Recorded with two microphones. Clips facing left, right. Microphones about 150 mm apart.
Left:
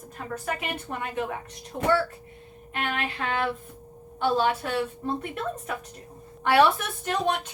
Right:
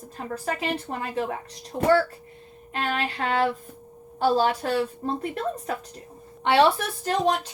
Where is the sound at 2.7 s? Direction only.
35° right (ahead or behind).